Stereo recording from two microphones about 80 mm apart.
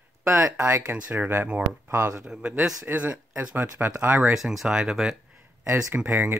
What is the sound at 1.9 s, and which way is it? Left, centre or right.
Speech, right.